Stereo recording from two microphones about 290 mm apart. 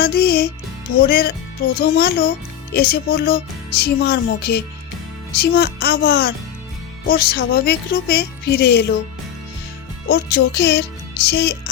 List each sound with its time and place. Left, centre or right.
0.0 s music: left
0.9 s speech: left
10.1 s speech: left